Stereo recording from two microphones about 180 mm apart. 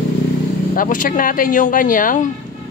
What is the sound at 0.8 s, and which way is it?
Speech, 50° left (ahead or behind).